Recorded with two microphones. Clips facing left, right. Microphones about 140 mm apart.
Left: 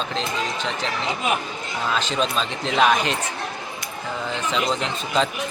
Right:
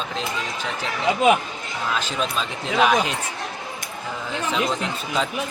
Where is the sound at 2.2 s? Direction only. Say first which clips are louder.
Left 2 dB; 10° right (ahead or behind).